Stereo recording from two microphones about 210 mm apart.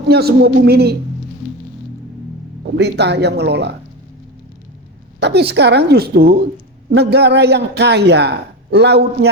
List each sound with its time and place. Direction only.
0.1 s a man's voice: 50° right (ahead or behind)
2.7 s a man's voice: 50° right (ahead or behind)
5.2 s a man's voice: 50° right (ahead or behind)